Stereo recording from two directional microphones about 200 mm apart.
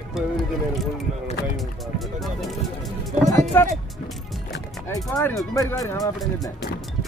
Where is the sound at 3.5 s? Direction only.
10° left (ahead or behind).